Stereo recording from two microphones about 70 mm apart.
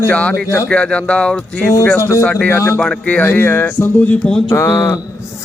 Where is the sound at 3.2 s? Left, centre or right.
Left.